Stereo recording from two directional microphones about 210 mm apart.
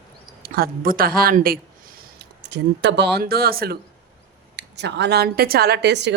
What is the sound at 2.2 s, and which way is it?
A woman's voice, 55° right (ahead or behind).